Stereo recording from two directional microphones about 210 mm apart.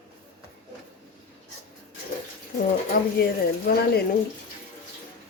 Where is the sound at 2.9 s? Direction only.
45° left (ahead or behind).